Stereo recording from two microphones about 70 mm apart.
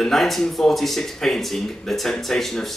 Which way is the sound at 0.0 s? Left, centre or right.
Centre.